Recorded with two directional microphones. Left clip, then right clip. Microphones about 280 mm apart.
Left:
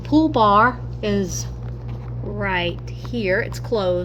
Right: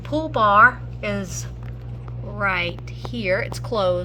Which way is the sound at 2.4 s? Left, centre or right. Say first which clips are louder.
Even; centre.